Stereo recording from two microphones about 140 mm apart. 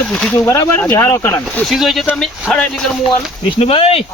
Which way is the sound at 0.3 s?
20° left (ahead or behind).